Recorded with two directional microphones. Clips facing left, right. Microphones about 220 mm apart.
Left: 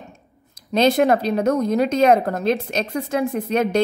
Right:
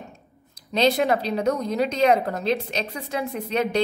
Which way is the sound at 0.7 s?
50° left (ahead or behind).